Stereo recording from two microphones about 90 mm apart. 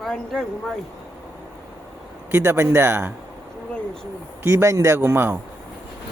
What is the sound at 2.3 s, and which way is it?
Speech, 30° right (ahead or behind).